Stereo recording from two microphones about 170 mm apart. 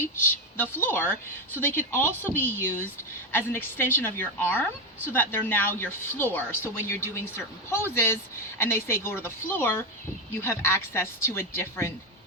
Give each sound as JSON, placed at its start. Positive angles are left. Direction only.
{"t": 0.0, "sound": "speech", "side_deg": 15}